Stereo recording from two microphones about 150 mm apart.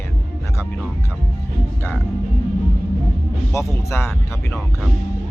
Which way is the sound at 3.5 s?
15° left (ahead or behind).